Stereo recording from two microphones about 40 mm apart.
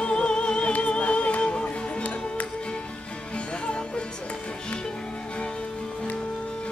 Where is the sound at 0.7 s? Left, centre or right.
Left.